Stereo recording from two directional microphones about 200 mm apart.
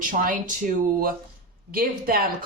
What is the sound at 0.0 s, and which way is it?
Speech, 40° right (ahead or behind).